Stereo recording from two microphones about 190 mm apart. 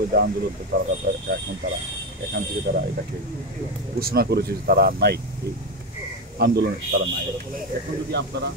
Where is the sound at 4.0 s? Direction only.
55° right (ahead or behind).